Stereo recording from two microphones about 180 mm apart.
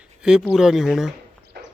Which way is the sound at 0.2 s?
5° right (ahead or behind).